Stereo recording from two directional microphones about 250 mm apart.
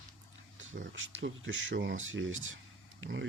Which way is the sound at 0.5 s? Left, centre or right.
Right.